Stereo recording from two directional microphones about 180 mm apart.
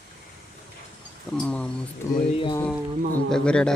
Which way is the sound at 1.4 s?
5° left (ahead or behind).